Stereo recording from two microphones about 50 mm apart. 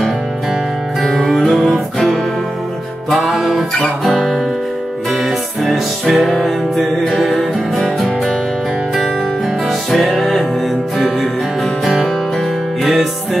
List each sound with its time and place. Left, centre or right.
1.0 s music: centre
3.1 s music: centre
9.7 s music: centre
12.9 s music: centre